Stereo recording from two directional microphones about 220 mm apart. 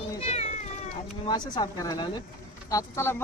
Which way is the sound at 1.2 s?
20° left (ahead or behind).